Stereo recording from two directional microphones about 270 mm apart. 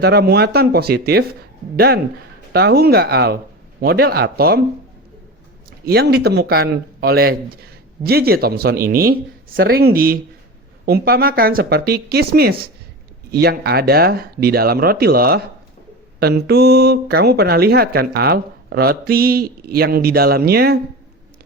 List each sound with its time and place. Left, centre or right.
0.0 s speech: right
5.8 s speech: right